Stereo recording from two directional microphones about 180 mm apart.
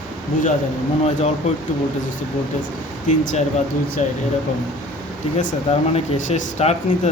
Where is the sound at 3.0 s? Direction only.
45° left (ahead or behind).